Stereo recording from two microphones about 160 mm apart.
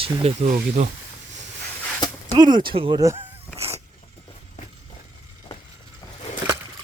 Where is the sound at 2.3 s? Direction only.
25° right (ahead or behind).